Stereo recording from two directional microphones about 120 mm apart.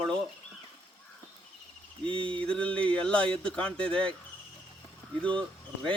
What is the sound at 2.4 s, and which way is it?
Speech, 10° left (ahead or behind).